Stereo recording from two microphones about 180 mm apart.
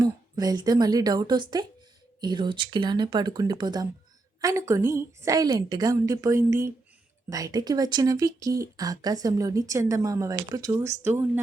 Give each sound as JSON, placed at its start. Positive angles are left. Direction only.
{"t": 0.0, "sound": "a woman's voice", "side_deg": -20}